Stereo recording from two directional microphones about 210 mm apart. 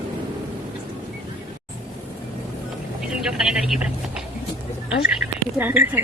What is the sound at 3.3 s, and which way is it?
Speech, centre (ahead or behind).